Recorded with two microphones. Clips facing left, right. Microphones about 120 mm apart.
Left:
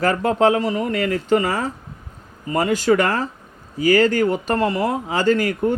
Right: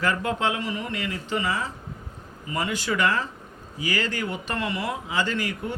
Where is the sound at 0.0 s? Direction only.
40° left (ahead or behind).